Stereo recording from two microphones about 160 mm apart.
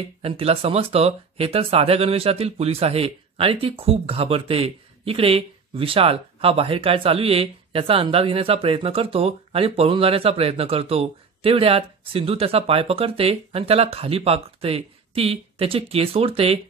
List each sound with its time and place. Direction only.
0.2 s speech: 40° right (ahead or behind)